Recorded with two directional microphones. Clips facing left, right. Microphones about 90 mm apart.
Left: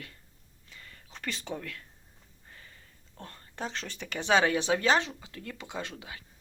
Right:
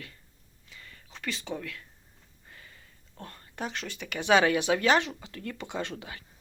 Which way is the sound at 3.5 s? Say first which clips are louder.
Right 1 dB; 30° left (ahead or behind).